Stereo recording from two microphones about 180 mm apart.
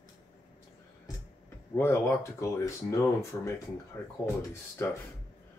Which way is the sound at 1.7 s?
15° left (ahead or behind).